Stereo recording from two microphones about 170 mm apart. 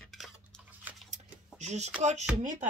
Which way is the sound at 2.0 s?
40° right (ahead or behind).